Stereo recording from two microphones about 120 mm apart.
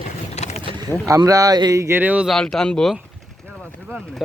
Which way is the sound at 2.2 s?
5° left (ahead or behind).